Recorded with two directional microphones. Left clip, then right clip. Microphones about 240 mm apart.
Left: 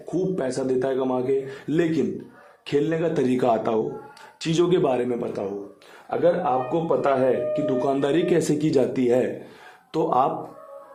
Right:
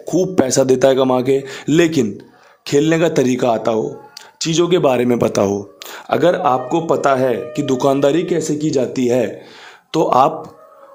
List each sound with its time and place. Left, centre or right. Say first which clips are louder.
0.1 s a man's voice: right 9 dB; right